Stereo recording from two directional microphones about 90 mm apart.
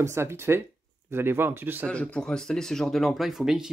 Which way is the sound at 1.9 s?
10° left (ahead or behind).